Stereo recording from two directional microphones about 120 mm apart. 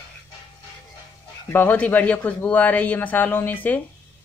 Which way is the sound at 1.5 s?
15° left (ahead or behind).